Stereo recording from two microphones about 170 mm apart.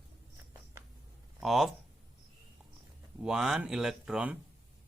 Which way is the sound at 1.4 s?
Centre (ahead or behind).